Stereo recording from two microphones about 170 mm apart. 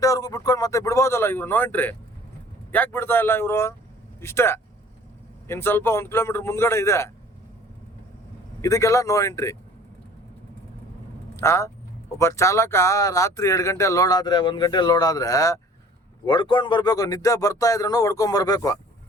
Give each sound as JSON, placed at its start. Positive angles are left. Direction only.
{"t": 0.0, "sound": "speech", "side_deg": 20}
{"t": 8.6, "sound": "speech", "side_deg": 20}
{"t": 11.3, "sound": "speech", "side_deg": 15}